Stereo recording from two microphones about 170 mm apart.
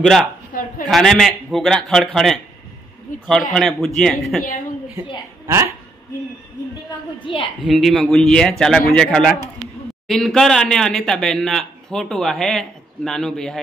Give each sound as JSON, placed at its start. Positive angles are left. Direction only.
{"t": 0.0, "sound": "speech", "side_deg": 0}
{"t": 0.5, "sound": "a sound", "side_deg": 55}
{"t": 0.8, "sound": "speech", "side_deg": 0}
{"t": 3.5, "sound": "speech", "side_deg": 0}
{"t": 7.3, "sound": "a woman's voice", "side_deg": 30}
{"t": 7.6, "sound": "speech", "side_deg": 0}